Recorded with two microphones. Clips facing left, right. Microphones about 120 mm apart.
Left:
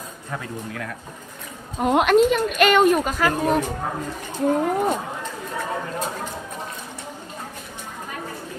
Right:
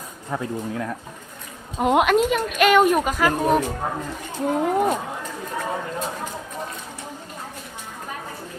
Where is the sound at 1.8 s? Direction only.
5° right (ahead or behind).